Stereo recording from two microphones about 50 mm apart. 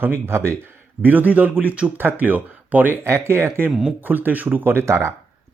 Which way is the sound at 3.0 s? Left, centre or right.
Right.